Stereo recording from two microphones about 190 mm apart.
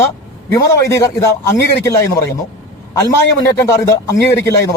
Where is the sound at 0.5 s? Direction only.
15° left (ahead or behind).